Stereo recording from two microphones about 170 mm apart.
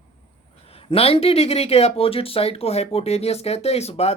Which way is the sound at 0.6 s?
35° left (ahead or behind).